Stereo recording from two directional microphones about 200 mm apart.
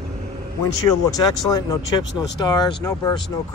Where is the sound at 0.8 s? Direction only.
20° left (ahead or behind).